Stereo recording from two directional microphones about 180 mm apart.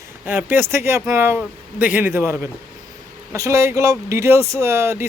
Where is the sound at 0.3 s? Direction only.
10° right (ahead or behind).